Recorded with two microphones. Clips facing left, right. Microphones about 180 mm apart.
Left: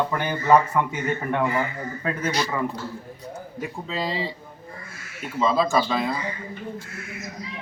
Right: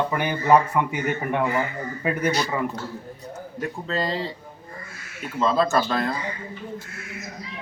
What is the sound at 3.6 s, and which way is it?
Speech, 5° left (ahead or behind).